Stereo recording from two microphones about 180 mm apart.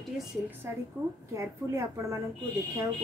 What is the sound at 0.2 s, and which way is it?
Speech, centre (ahead or behind).